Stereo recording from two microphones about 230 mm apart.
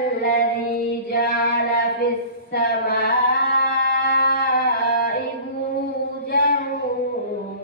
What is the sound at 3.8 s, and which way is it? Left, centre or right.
Music, left.